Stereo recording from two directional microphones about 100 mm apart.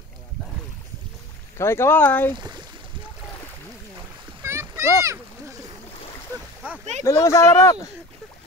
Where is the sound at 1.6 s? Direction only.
25° left (ahead or behind).